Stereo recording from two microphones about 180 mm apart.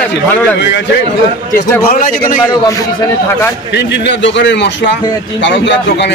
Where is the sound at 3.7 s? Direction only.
75° left (ahead or behind).